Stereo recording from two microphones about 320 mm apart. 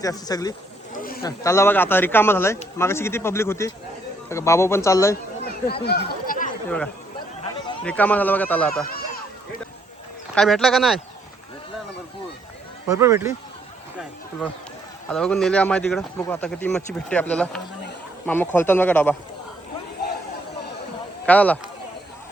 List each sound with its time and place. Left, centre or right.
0.0 s a man's voice: centre
0.9 s a sound: left
1.2 s a man's voice: centre
5.6 s speech: left
6.7 s speech: centre
10.3 s speech: centre
12.9 s speech: centre
15.1 s speech: centre
21.2 s speech: centre